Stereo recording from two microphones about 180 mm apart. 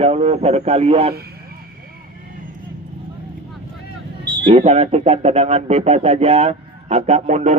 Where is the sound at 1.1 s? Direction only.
60° right (ahead or behind).